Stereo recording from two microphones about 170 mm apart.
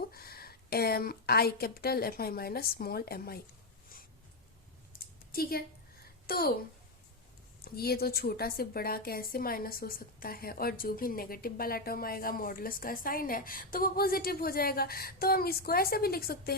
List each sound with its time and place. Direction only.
0.1 s a woman's voice: 65° left (ahead or behind)
4.9 s a sound: 60° left (ahead or behind)
6.2 s a woman's voice: 65° left (ahead or behind)
7.6 s a woman's voice: 65° left (ahead or behind)